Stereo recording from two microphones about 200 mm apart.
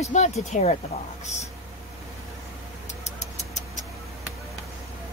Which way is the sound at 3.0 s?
35° left (ahead or behind).